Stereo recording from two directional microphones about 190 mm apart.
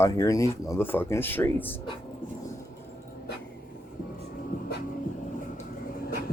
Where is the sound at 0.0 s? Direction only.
15° left (ahead or behind).